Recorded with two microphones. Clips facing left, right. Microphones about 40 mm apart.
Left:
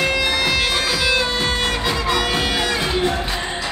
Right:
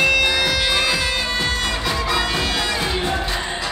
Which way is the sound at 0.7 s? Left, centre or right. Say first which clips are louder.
Right 1 dB; centre.